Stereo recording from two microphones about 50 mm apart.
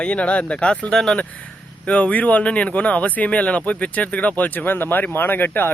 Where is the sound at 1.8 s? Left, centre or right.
Left.